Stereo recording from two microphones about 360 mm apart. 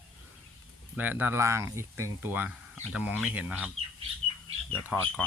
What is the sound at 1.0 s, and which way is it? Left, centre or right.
Speech, centre.